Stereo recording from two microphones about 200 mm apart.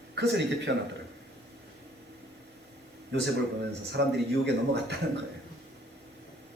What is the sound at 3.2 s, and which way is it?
Speech, 55° right (ahead or behind).